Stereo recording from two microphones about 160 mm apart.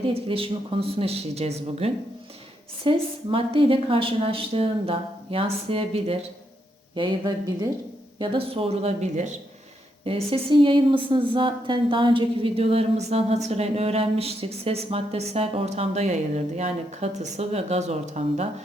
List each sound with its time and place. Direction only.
0.1 s speech: 35° right (ahead or behind)
6.9 s speech: 25° right (ahead or behind)
8.2 s speech: 35° right (ahead or behind)